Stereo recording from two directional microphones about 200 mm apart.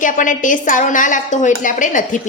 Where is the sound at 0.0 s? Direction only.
40° left (ahead or behind).